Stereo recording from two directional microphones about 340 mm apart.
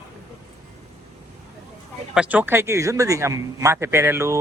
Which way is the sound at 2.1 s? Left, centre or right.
Centre.